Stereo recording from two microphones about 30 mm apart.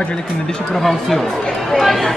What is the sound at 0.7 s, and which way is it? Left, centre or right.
A woman's voice, centre.